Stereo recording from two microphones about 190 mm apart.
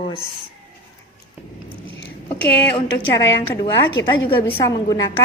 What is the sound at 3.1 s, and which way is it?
A woman's voice, 20° left (ahead or behind).